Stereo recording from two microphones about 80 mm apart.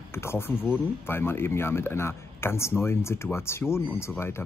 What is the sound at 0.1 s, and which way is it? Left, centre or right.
Speech, left.